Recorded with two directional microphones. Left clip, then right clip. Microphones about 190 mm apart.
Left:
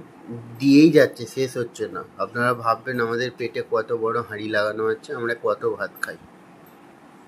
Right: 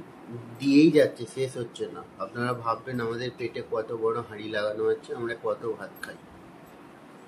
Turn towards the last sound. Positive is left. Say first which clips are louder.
# left 9 dB
turn(degrees=25)  # may be behind; listen again after turning